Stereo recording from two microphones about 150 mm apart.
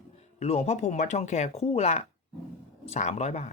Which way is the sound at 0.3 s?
45° left (ahead or behind).